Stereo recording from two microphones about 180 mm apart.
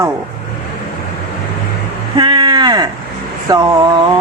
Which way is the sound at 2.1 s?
30° right (ahead or behind).